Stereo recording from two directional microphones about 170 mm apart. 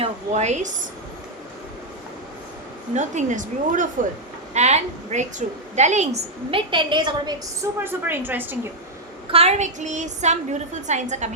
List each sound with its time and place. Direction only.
0.0 s child singing: 40° right (ahead or behind)
2.9 s child singing: 45° right (ahead or behind)
4.5 s a woman's voice: 40° right (ahead or behind); by 7.7 s 25° right (ahead or behind)
7.9 s a woman's voice: 10° right (ahead or behind)
9.3 s child singing: 40° right (ahead or behind)